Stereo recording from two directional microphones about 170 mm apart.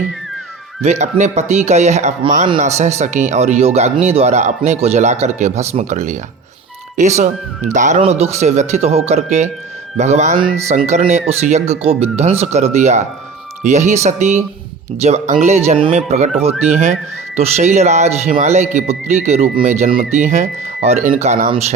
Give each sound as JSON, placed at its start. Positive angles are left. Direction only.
{"t": 0.8, "sound": "speech", "side_deg": -40}